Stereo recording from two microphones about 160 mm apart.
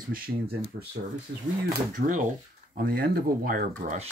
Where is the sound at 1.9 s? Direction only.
55° right (ahead or behind).